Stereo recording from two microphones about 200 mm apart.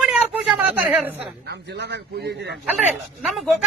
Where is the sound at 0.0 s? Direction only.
5° right (ahead or behind).